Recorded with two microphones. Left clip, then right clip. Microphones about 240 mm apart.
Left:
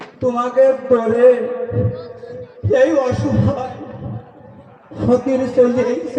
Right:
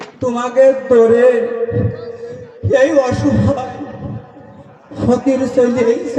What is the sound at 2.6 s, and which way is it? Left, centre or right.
Speech, right.